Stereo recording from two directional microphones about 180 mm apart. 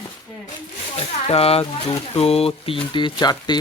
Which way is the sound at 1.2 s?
35° left (ahead or behind).